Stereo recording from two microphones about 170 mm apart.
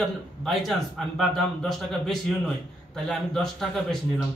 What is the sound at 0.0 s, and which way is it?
A man's voice, centre (ahead or behind).